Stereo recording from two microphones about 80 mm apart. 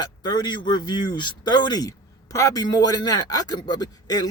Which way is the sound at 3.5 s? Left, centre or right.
Left.